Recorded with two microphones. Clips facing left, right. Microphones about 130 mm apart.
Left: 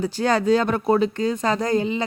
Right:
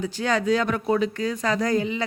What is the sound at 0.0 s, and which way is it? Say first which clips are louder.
Speech: left 4 dB; 35° left (ahead or behind).